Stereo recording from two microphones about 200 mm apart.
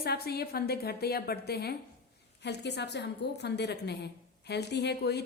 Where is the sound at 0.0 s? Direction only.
50° left (ahead or behind).